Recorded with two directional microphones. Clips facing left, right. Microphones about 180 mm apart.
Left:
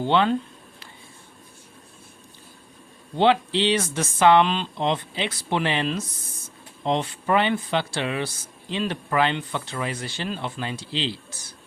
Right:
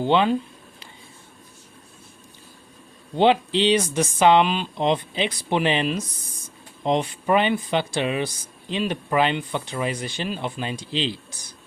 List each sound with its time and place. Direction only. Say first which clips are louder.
0.0 s speech: right 1 dB; 15° right (ahead or behind)
3.2 s speech: right 1 dB; 15° right (ahead or behind)